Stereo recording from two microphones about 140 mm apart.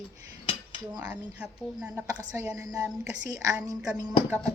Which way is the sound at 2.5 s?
25° right (ahead or behind).